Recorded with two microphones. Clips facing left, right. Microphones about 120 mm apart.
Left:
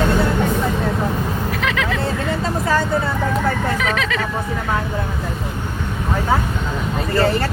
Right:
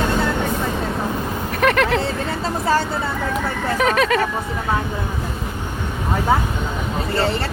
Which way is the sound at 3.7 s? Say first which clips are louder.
Right 4 dB; 40° right (ahead or behind).